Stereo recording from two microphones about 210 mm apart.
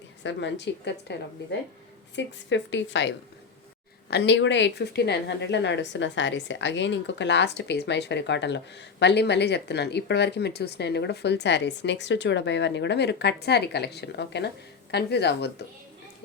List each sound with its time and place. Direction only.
0.2 s a woman's voice: 60° left (ahead or behind)
4.1 s a woman's voice: 55° left (ahead or behind)